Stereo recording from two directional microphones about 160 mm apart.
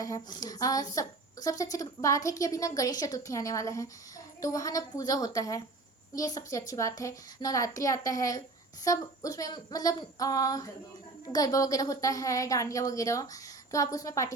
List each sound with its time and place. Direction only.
0.0 s a woman's voice: 20° left (ahead or behind)